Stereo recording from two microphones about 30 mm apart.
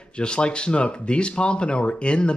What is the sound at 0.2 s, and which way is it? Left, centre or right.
Speech, left.